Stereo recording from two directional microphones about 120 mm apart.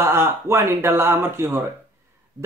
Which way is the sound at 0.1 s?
20° right (ahead or behind).